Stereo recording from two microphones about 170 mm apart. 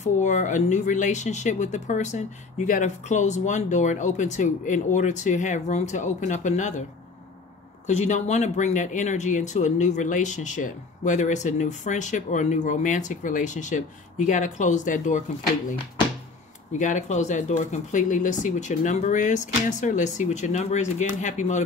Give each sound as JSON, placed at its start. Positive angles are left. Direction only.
{"t": 0.0, "sound": "speech", "side_deg": 45}
{"t": 7.8, "sound": "speech", "side_deg": 45}
{"t": 16.7, "sound": "speech", "side_deg": 45}